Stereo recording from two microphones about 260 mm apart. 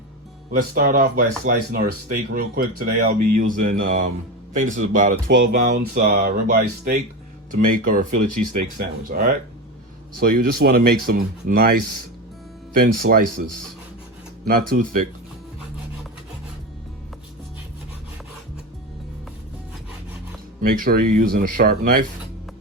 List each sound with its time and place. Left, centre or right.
0.7 s speech: right
14.4 s speech: right
20.6 s speech: right